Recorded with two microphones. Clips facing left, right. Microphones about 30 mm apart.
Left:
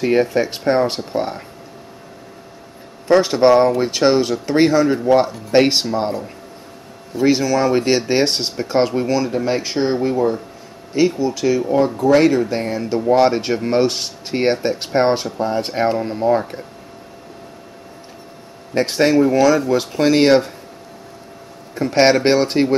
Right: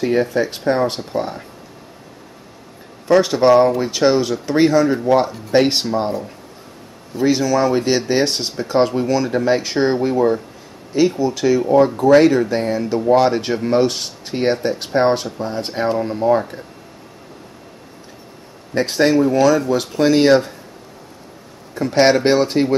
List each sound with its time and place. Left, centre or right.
0.1 s speech: left
3.1 s speech: centre
7.2 s speech: centre
8.2 s speech: centre
18.8 s speech: centre
20.1 s speech: left
21.7 s speech: centre